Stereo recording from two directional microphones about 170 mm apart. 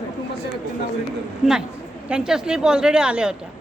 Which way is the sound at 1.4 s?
Centre (ahead or behind).